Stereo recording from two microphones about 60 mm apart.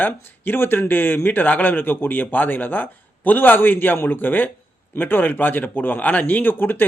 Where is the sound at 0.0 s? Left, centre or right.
Left.